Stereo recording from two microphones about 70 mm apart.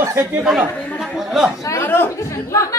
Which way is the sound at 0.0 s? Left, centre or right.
Right.